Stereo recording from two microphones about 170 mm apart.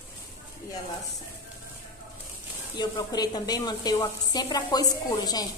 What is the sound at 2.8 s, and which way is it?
A woman's voice, 25° left (ahead or behind).